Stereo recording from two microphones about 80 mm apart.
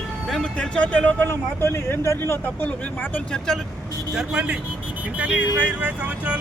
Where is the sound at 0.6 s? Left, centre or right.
Centre.